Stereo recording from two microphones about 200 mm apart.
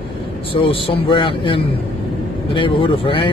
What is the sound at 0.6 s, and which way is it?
Speech, 25° left (ahead or behind).